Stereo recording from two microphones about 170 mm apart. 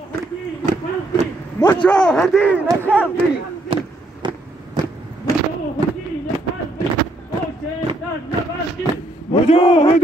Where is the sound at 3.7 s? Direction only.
30° right (ahead or behind).